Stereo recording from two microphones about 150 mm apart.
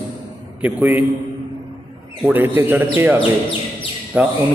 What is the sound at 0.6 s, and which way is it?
Speech, 10° right (ahead or behind).